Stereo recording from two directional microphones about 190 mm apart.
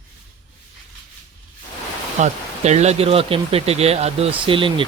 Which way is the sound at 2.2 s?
35° right (ahead or behind).